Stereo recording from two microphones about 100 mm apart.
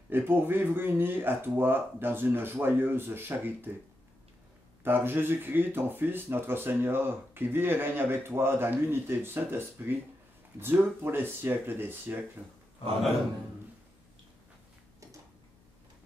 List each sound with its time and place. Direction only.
0.1 s speech: 20° right (ahead or behind)
4.8 s speech: 20° right (ahead or behind)